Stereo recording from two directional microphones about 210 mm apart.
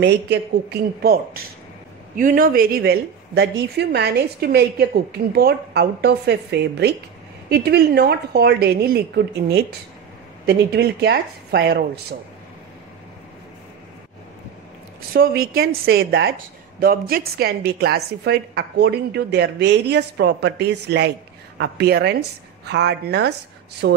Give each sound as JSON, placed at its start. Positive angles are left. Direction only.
{"t": 0.0, "sound": "speech", "side_deg": -55}
{"t": 15.1, "sound": "speech", "side_deg": -45}
{"t": 16.8, "sound": "speech", "side_deg": -45}